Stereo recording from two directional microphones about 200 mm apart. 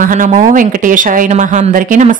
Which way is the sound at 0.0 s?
40° right (ahead or behind).